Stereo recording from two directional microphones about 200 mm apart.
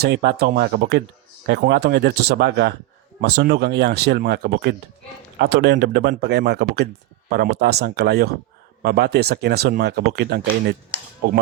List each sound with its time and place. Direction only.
0.0 s speech: 55° right (ahead or behind)